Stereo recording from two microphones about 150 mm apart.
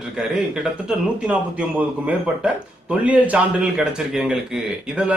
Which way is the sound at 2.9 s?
10° right (ahead or behind).